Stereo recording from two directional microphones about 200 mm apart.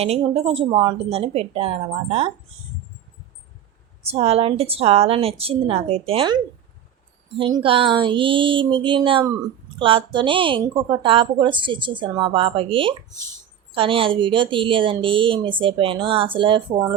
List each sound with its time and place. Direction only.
0.0 s a woman's voice: 30° right (ahead or behind)
4.0 s a woman's voice: 30° right (ahead or behind)